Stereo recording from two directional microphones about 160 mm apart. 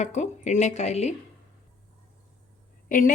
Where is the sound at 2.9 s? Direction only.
60° left (ahead or behind).